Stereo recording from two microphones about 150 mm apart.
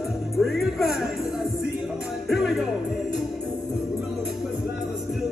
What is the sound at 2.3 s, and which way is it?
Music, centre (ahead or behind).